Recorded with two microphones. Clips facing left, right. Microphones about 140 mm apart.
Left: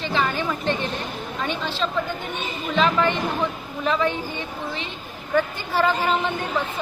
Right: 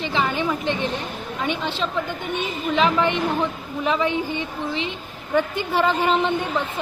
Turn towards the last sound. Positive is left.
turn(degrees=-20)  # may be behind; listen again after turning